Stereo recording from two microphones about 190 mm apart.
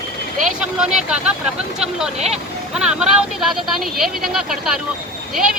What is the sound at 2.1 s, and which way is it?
Speech, 35° right (ahead or behind).